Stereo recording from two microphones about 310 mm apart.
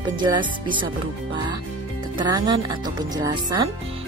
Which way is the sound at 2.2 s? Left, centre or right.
Centre.